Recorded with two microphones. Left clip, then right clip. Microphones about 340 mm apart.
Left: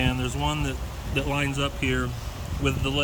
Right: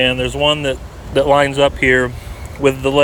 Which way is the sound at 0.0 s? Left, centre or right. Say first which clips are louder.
Right 13 dB; centre.